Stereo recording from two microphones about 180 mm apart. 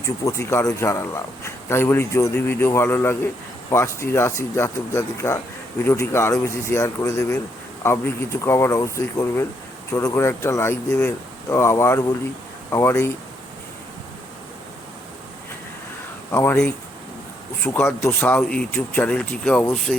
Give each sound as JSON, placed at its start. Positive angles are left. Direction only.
{"t": 0.0, "sound": "a man's voice", "side_deg": 15}
{"t": 16.3, "sound": "a man's voice", "side_deg": 15}